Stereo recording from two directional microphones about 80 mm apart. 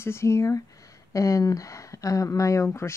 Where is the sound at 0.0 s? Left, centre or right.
Left.